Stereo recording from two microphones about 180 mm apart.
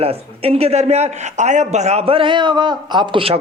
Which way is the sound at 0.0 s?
35° right (ahead or behind).